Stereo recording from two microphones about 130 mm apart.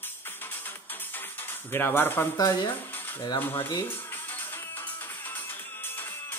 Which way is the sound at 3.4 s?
15° left (ahead or behind).